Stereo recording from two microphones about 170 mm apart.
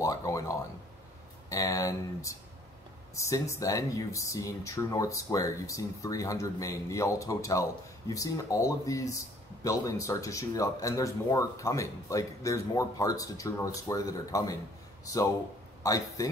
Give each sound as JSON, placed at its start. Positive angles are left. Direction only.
{"t": 0.0, "sound": "speech", "side_deg": 20}
{"t": 15.8, "sound": "speech", "side_deg": 20}